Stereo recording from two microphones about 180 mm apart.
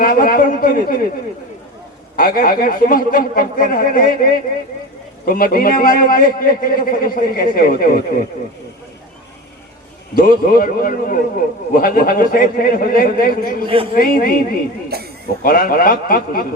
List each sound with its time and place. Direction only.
0.0 s a man's voice: 55° left (ahead or behind)
2.1 s a man's voice: 55° left (ahead or behind)
10.2 s a man's voice: 55° left (ahead or behind)
14.9 s speech: 60° right (ahead or behind)
15.4 s a man's voice: 55° left (ahead or behind)